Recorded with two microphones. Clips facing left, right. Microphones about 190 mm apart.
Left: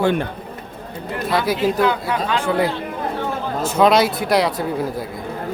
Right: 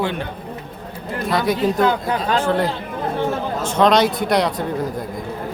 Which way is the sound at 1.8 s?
40° right (ahead or behind).